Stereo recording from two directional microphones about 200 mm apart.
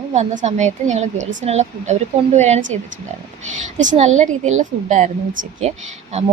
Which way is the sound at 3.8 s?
40° right (ahead or behind).